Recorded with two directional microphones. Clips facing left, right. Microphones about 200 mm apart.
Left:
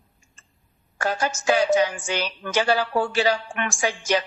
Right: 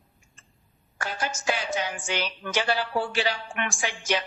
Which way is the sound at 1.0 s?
40° left (ahead or behind).